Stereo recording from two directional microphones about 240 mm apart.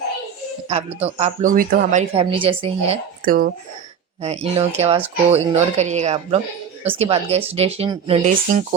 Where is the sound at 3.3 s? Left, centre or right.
Right.